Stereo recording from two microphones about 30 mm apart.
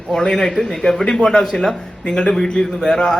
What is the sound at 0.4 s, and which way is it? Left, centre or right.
A man's voice, left.